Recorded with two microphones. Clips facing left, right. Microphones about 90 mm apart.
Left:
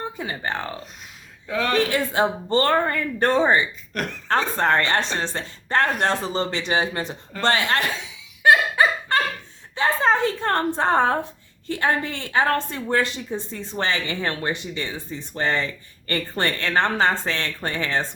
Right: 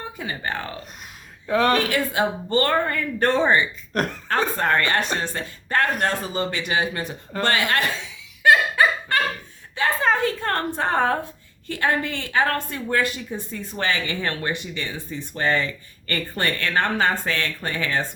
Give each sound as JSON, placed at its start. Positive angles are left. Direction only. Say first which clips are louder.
{"t": 0.2, "sound": "a woman's voice", "louder": "right 2 dB", "side_deg": 25}
{"t": 1.5, "sound": "speech", "louder": "right 3 dB", "side_deg": -50}
{"t": 1.9, "sound": "a woman's voice", "louder": "left 1 dB", "side_deg": 25}
{"t": 3.9, "sound": "speech", "louder": "right 4 dB", "side_deg": -35}
{"t": 4.5, "sound": "a woman's voice", "louder": "left 1 dB", "side_deg": 30}
{"t": 8.4, "sound": "dog", "louder": "even", "side_deg": 20}
{"t": 9.7, "sound": "a woman's voice", "louder": "left 1 dB", "side_deg": 25}